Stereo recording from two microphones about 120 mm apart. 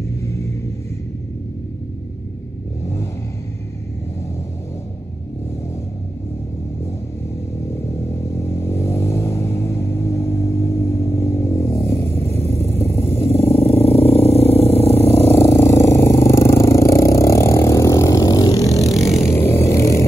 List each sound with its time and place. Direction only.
2.8 s vehicle: 25° left (ahead or behind)
7.9 s vehicle: 25° left (ahead or behind)
13.3 s vehicle: 55° left (ahead or behind)
15.2 s a sound: 25° left (ahead or behind)
19.0 s vehicle: 25° left (ahead or behind)